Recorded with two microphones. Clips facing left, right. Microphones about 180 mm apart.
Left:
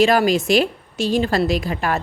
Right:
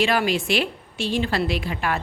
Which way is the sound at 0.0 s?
40° left (ahead or behind).